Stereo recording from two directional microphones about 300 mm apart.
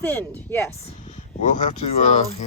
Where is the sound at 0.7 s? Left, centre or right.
Left.